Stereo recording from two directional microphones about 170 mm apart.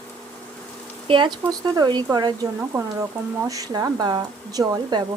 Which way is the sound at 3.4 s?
20° right (ahead or behind).